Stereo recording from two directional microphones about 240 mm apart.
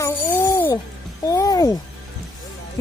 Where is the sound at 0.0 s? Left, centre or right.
Centre.